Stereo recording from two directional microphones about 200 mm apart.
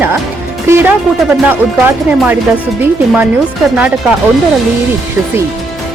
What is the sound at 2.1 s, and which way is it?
Speech, 10° right (ahead or behind).